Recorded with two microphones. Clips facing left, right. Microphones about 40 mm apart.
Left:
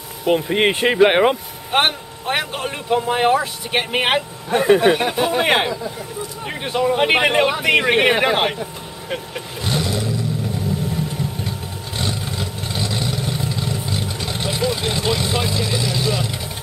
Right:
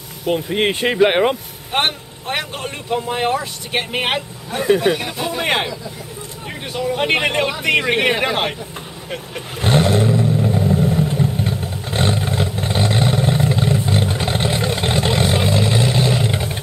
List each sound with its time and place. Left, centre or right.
0.2 s speech: centre
6.4 s speech: centre
7.0 s speech: centre
9.6 s roar: right
10.9 s vehicle: right